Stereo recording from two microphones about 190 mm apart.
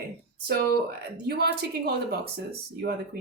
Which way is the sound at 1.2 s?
55° right (ahead or behind).